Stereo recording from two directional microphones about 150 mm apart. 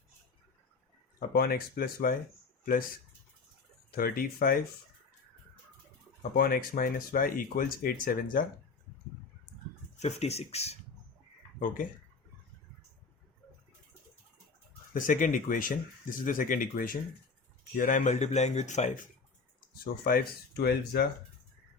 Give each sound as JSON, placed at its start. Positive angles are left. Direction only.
{"t": 1.3, "sound": "speech", "side_deg": 80}
{"t": 3.9, "sound": "speech", "side_deg": 75}
{"t": 6.3, "sound": "speech", "side_deg": 80}
{"t": 10.0, "sound": "speech", "side_deg": 45}
{"t": 11.6, "sound": "speech", "side_deg": 60}
{"t": 14.9, "sound": "speech", "side_deg": 60}
{"t": 19.8, "sound": "speech", "side_deg": 85}